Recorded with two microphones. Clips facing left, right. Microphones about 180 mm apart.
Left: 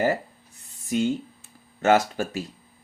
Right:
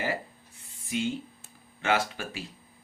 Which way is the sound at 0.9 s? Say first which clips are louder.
Left 6 dB; 45° left (ahead or behind).